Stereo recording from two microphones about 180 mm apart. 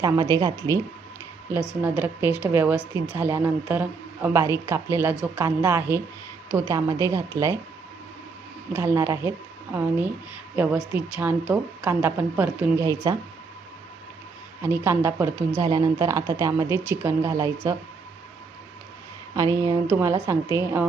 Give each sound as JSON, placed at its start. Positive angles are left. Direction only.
{"t": 0.0, "sound": "speech", "side_deg": -20}
{"t": 1.8, "sound": "speech", "side_deg": -10}
{"t": 8.7, "sound": "speech", "side_deg": -15}
{"t": 14.6, "sound": "speech", "side_deg": -15}
{"t": 19.4, "sound": "speech", "side_deg": -15}